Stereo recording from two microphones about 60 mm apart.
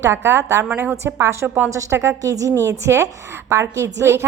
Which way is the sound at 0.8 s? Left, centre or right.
Right.